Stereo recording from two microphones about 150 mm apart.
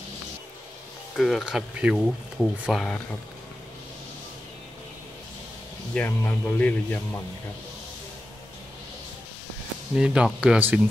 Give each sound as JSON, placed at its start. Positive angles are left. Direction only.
{"t": 1.1, "sound": "speech", "side_deg": 0}
{"t": 5.9, "sound": "speech", "side_deg": 15}
{"t": 9.9, "sound": "speech", "side_deg": -5}